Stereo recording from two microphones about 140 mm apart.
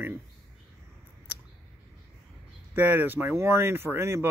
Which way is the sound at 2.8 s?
15° right (ahead or behind).